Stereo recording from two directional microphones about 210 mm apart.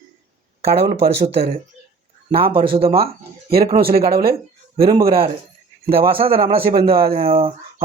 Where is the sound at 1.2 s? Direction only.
30° right (ahead or behind).